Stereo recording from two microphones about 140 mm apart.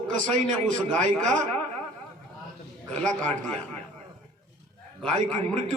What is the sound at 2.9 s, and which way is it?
Speech, 10° left (ahead or behind).